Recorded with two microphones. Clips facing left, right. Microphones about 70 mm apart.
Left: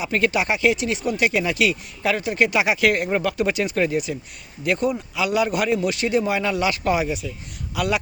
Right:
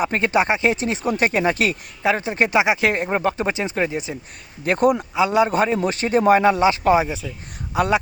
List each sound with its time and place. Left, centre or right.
0.1 s speech: right
4.6 s speech: right
5.1 s speech: right